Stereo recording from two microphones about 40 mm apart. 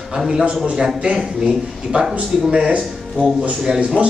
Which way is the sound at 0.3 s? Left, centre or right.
Centre.